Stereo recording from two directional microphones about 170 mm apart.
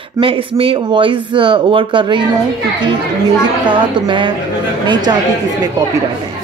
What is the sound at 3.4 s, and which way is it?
A woman's voice, 30° right (ahead or behind).